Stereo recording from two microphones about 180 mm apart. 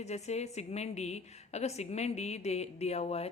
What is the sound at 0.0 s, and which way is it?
A woman's voice, 40° left (ahead or behind).